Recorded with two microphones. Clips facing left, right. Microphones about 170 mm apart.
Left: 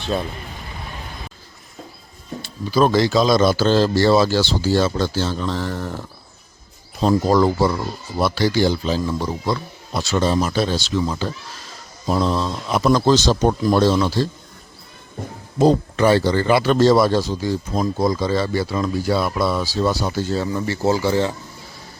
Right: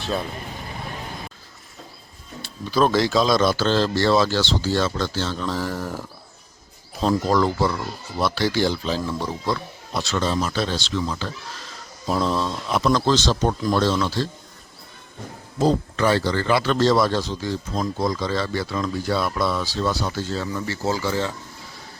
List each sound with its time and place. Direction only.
0.0 s speech: centre (ahead or behind)
2.4 s speech: 5° left (ahead or behind)
7.0 s speech: 10° left (ahead or behind)
8.2 s speech: centre (ahead or behind)
15.5 s speech: 15° left (ahead or behind)
20.4 s speech: 25° left (ahead or behind)